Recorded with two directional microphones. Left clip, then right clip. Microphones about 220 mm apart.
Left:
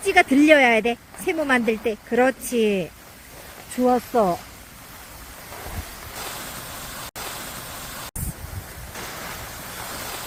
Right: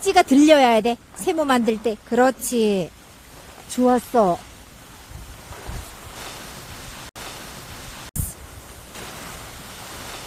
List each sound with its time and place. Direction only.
0.0 s a woman's voice: 20° right (ahead or behind)